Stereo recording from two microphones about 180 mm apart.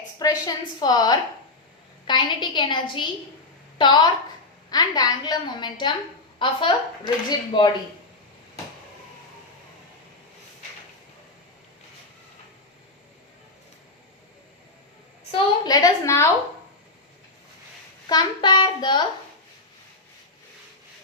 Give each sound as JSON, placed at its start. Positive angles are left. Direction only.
{"t": 0.2, "sound": "speech", "side_deg": 20}
{"t": 3.8, "sound": "speech", "side_deg": 25}
{"t": 15.3, "sound": "a sound", "side_deg": 20}
{"t": 18.1, "sound": "speech", "side_deg": 25}